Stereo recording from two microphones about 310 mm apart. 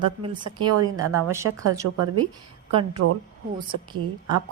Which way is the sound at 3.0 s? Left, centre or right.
Right.